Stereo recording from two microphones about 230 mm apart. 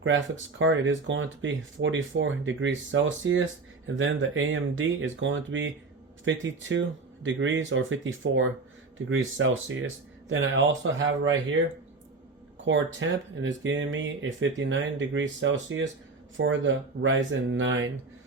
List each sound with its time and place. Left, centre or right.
0.0 s speech: right
12.6 s speech: right